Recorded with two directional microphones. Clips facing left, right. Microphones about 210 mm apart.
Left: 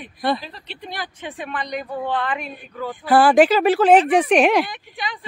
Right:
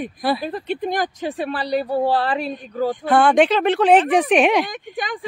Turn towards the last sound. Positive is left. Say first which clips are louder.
# right 4 dB
turn(degrees=-45)  # may be behind; listen again after turning